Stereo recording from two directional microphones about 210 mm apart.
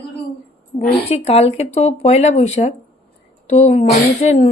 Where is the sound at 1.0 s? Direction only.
30° left (ahead or behind).